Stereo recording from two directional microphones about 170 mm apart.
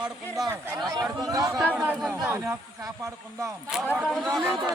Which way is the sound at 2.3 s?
15° right (ahead or behind).